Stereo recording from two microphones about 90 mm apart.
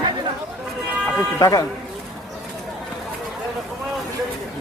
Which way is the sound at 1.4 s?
40° left (ahead or behind).